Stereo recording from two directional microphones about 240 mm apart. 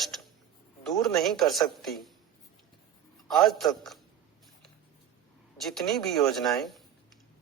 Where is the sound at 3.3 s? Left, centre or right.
Centre.